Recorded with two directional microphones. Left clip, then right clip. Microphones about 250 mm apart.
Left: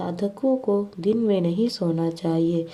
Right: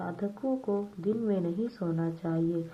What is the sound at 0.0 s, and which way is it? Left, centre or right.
Speech, left.